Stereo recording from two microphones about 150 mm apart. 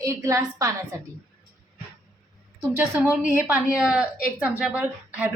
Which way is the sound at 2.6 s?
10° right (ahead or behind).